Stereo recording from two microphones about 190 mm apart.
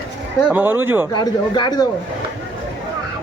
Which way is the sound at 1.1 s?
25° left (ahead or behind).